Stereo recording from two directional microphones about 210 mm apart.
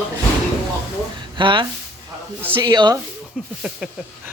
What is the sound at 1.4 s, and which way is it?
Speech, 25° right (ahead or behind).